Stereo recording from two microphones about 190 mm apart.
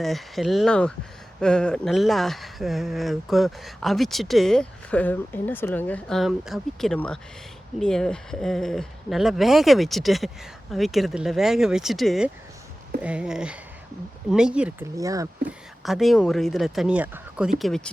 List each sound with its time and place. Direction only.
0.0 s speech: centre (ahead or behind)
14.9 s speech: 15° right (ahead or behind)
15.8 s speech: centre (ahead or behind)